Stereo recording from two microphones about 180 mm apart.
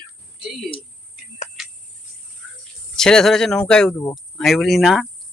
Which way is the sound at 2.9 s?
5° left (ahead or behind).